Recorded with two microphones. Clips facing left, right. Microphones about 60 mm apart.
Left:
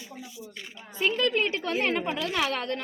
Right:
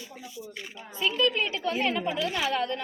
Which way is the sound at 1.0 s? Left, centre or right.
Left.